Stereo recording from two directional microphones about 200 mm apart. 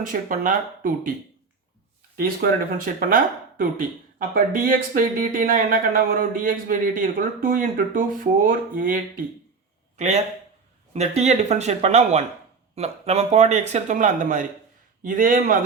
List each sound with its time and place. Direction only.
0.0 s speech: 40° right (ahead or behind)
2.1 s speech: 45° right (ahead or behind)